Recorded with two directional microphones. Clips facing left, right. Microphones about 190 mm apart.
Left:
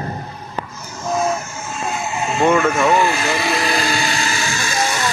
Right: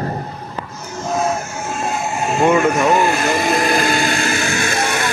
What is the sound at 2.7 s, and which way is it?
Vehicle, 45° right (ahead or behind).